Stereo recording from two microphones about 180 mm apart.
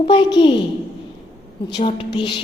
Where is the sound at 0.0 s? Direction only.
25° left (ahead or behind).